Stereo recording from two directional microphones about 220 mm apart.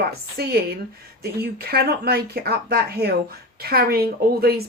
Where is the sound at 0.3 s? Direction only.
45° right (ahead or behind).